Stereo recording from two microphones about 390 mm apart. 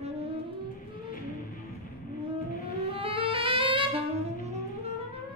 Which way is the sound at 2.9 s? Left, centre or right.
Centre.